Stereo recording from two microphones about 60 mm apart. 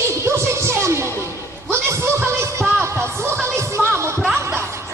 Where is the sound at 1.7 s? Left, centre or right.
Right.